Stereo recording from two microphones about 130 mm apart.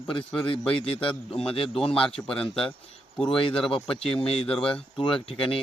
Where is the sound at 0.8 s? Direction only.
45° left (ahead or behind).